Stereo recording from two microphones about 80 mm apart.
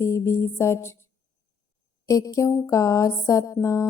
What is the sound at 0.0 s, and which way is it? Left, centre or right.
Music, left.